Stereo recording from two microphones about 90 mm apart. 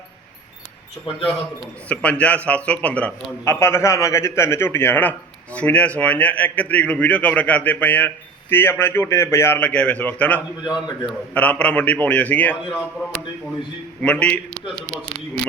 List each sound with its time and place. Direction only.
1.1 s a man's voice: 80° left
1.9 s a man's voice: 15° left (ahead or behind)
3.4 s a man's voice: 30° left (ahead or behind)
10.6 s a man's voice: 55° left (ahead or behind)
11.3 s a man's voice: 15° left (ahead or behind)
14.0 s a man's voice: 15° left (ahead or behind)